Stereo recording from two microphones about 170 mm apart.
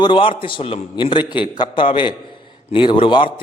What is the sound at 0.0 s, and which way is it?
A man's voice, 30° left (ahead or behind).